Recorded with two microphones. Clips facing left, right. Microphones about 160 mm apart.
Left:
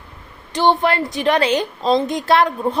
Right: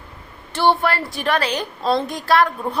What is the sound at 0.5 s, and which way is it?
A woman's voice, 20° left (ahead or behind).